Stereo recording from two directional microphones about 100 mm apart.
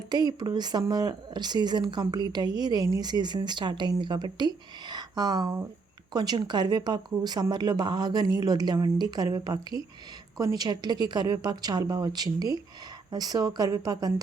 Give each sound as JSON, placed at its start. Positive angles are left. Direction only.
{"t": 0.1, "sound": "speech", "side_deg": -45}